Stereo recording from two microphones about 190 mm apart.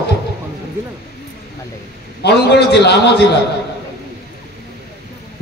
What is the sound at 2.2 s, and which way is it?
A man's voice, 65° left (ahead or behind).